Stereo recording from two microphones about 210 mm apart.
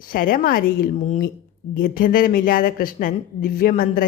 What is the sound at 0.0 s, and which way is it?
Speech, 45° left (ahead or behind).